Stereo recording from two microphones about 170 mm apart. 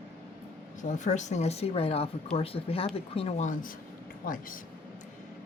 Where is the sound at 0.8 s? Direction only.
45° left (ahead or behind).